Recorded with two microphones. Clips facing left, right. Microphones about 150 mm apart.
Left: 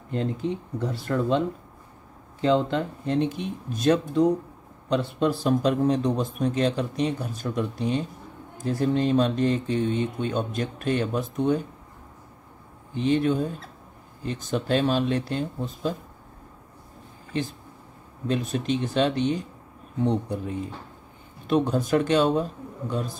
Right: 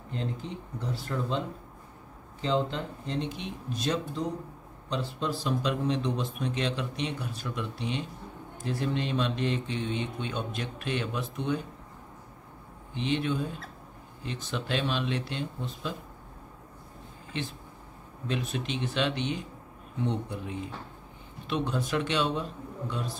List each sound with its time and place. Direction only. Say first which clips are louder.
0.1 s speech: left 8 dB; 55° left (ahead or behind)
2.4 s a man's voice: left 6 dB; 60° left (ahead or behind); by 11.6 s 45° left (ahead or behind)
12.9 s a man's voice: left 7 dB; 40° left (ahead or behind)
18.2 s a man's voice: left 6 dB; 40° left (ahead or behind)